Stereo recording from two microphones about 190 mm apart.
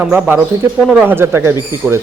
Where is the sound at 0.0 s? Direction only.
10° right (ahead or behind).